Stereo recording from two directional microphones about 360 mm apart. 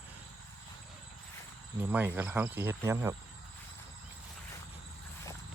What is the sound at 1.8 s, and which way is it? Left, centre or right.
Speech, centre.